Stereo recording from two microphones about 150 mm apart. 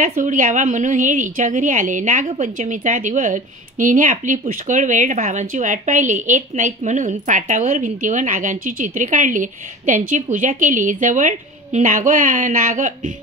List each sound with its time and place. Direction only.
0.0 s a woman's voice: 60° right (ahead or behind)